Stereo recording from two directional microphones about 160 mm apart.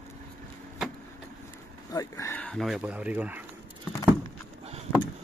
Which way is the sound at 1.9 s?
20° left (ahead or behind).